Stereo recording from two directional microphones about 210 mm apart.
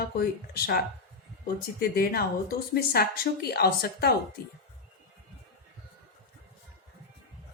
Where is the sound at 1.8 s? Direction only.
45° left (ahead or behind).